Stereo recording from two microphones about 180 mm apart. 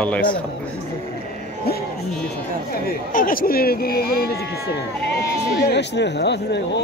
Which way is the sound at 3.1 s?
50° left (ahead or behind).